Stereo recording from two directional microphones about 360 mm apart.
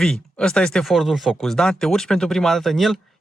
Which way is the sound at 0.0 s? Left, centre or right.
Centre.